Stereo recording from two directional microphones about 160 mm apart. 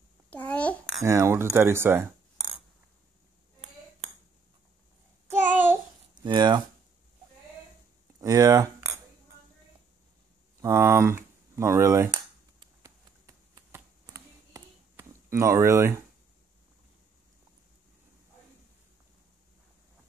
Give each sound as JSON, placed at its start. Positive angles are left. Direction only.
{"t": 0.3, "sound": "babbling", "side_deg": 10}
{"t": 1.0, "sound": "speech", "side_deg": -20}
{"t": 5.5, "sound": "babbling", "side_deg": -10}
{"t": 6.1, "sound": "speech", "side_deg": -30}
{"t": 8.2, "sound": "speech", "side_deg": -20}
{"t": 10.6, "sound": "cap gun", "side_deg": -20}
{"t": 14.0, "sound": "a sound", "side_deg": -20}